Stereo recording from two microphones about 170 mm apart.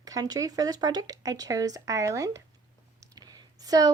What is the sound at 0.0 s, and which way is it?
A woman's voice, 20° right (ahead or behind).